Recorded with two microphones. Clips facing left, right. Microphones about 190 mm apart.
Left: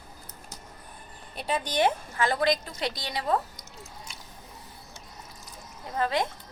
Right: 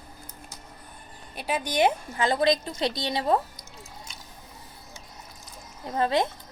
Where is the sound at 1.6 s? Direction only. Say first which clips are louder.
Right 2 dB; 15° right (ahead or behind).